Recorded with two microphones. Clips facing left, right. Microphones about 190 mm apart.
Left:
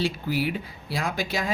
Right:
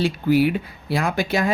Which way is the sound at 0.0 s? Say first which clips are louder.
Right 8 dB; 60° right (ahead or behind).